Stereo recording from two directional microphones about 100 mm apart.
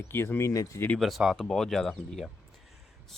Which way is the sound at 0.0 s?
25° left (ahead or behind).